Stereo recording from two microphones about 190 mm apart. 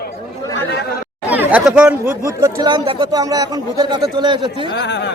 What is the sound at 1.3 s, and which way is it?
Speech, 10° right (ahead or behind).